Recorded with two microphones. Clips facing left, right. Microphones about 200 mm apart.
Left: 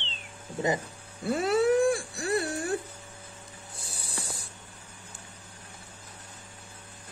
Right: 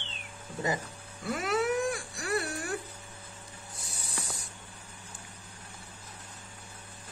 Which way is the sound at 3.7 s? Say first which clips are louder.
Left 2 dB; 30° left (ahead or behind).